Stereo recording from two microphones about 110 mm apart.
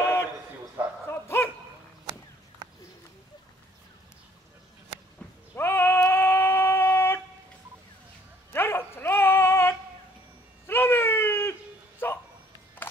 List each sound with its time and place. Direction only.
0.0 s a sound: 25° left (ahead or behind)
1.0 s dog: 25° left (ahead or behind)
5.6 s female singing: 20° left (ahead or behind)
8.5 s dog: 20° left (ahead or behind)
10.7 s wail: 20° left (ahead or behind)
12.0 s bow-wow: 20° left (ahead or behind)